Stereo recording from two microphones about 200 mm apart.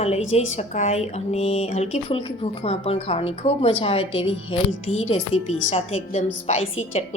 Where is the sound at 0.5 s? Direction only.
35° left (ahead or behind).